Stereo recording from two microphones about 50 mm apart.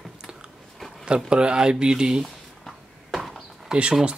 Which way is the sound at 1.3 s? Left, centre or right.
Centre.